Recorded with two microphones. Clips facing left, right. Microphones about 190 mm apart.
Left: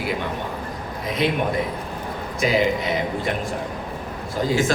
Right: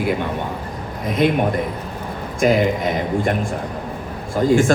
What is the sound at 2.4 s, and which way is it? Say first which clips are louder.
Speech: right 4 dB; 50° right (ahead or behind).